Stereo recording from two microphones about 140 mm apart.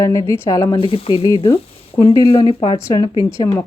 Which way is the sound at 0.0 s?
20° left (ahead or behind).